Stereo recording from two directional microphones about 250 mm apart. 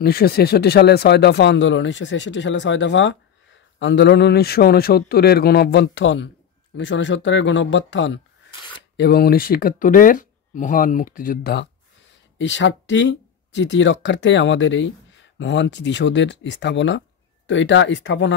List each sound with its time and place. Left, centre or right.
0.0 s speech: left